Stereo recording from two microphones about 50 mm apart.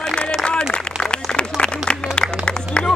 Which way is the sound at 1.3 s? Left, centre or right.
Centre.